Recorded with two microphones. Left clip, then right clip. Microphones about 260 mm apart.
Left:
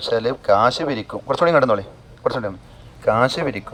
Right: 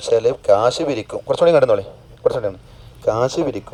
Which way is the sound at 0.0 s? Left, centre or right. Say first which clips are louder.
Right 4 dB; right.